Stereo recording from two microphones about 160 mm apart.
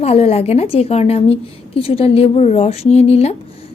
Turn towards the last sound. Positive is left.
turn(degrees=40)  # may be behind; listen again after turning